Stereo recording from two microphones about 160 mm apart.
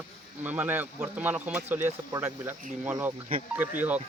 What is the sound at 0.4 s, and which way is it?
Speech, 10° right (ahead or behind).